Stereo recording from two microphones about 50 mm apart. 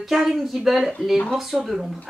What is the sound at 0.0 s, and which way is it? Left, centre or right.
Speech, centre.